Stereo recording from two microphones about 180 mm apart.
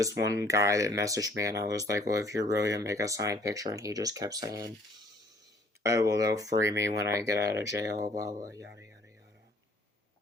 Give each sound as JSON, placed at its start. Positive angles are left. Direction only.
{"t": 0.0, "sound": "speech", "side_deg": -15}
{"t": 5.8, "sound": "speech", "side_deg": -20}